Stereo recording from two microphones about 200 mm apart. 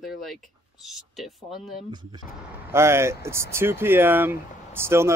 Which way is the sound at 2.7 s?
15° right (ahead or behind).